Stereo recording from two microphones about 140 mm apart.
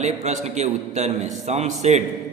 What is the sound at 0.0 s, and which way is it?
A man's voice, 55° right (ahead or behind).